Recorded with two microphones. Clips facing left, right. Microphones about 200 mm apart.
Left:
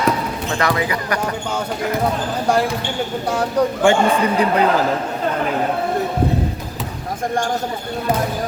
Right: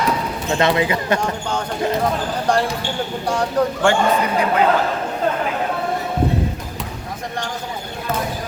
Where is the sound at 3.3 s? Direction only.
5° left (ahead or behind).